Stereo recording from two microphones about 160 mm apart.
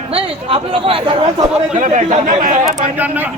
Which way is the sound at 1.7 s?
50° right (ahead or behind).